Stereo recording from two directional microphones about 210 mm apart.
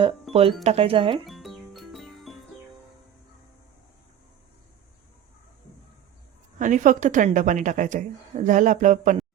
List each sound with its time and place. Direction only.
0.0 s speech: 25° right (ahead or behind)
1.3 s music: centre (ahead or behind)
6.6 s a woman's voice: 40° right (ahead or behind)